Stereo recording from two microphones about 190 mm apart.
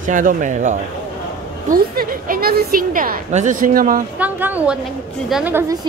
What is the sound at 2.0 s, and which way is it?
Speech, 50° right (ahead or behind).